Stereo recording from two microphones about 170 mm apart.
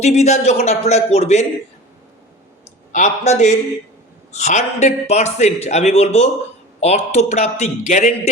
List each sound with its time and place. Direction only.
0.0 s a man's voice: 40° left (ahead or behind)
2.9 s a man's voice: 45° left (ahead or behind)